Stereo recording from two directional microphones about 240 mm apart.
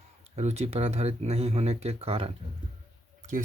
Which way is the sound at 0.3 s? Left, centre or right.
Right.